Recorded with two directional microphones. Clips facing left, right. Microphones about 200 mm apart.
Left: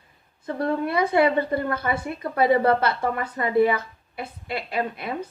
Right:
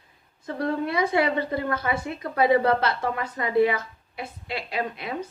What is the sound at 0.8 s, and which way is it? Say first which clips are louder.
A woman's voice: left 4 dB; 55° left (ahead or behind).